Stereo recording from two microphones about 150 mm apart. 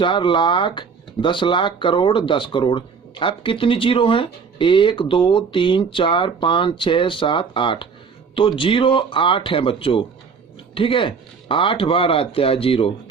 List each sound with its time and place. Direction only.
0.0 s speech: 35° left (ahead or behind)